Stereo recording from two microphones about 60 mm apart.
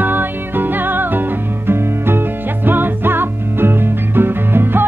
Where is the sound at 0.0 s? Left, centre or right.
Right.